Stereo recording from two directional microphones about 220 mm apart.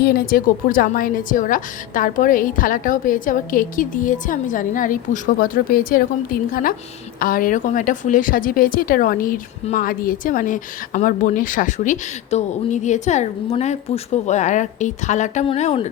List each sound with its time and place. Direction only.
0.0 s speech: 40° left (ahead or behind)